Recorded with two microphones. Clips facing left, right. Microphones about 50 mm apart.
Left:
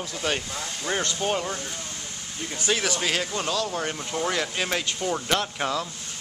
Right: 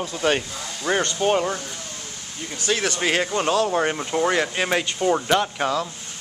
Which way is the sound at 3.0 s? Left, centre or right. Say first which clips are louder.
Right 5 dB; right.